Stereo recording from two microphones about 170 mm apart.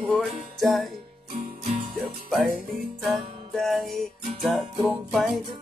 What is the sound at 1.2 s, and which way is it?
Music, 55° right (ahead or behind).